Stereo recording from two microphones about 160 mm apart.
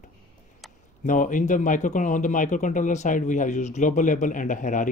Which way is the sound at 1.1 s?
55° left (ahead or behind).